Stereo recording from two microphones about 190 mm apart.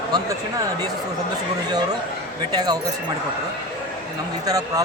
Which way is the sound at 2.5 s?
20° right (ahead or behind).